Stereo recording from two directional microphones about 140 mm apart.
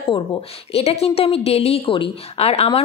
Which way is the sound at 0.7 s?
45° left (ahead or behind).